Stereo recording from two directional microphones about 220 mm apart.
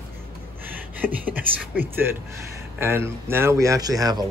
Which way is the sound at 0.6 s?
10° right (ahead or behind).